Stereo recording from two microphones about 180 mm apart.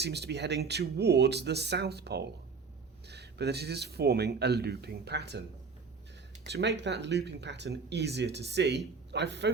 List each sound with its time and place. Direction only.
0.0 s speech: 70° right (ahead or behind)
6.4 s speech: 75° right (ahead or behind)